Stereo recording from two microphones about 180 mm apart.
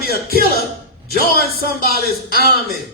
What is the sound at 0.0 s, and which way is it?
A man's voice, 60° left (ahead or behind).